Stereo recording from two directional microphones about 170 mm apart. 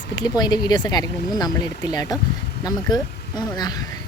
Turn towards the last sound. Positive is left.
turn(degrees=25)  # may be behind; listen again after turning